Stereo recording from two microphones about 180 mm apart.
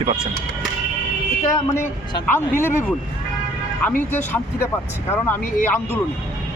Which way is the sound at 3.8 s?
10° left (ahead or behind).